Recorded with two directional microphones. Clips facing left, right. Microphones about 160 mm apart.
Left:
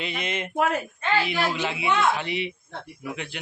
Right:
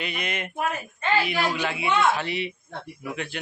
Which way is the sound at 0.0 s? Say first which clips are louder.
Left 1 dB; 25° left (ahead or behind).